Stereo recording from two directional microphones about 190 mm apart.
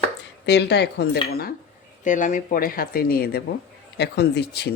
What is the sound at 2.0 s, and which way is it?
Speech, 40° left (ahead or behind).